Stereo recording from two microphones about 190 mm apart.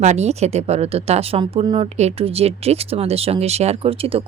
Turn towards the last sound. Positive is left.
turn(degrees=-30)  # may be behind; listen again after turning